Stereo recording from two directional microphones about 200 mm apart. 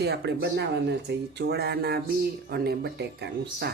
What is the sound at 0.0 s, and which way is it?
Speech, 60° right (ahead or behind).